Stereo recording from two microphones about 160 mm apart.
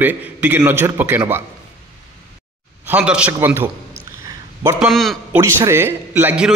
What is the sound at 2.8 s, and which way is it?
Speech, 10° right (ahead or behind).